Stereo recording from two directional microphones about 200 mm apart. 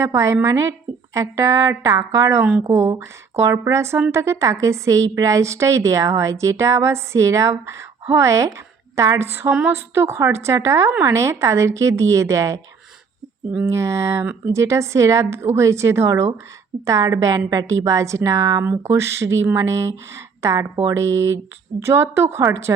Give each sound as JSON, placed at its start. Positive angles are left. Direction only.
{"t": 0.0, "sound": "a woman's voice", "side_deg": -15}